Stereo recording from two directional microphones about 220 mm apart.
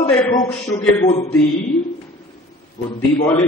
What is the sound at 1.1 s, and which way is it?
Speech, 30° left (ahead or behind).